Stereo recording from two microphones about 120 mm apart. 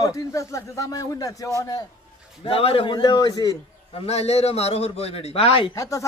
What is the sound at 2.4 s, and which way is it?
Speech, 50° left (ahead or behind).